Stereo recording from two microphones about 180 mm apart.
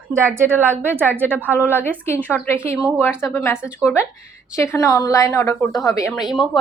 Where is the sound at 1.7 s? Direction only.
10° left (ahead or behind).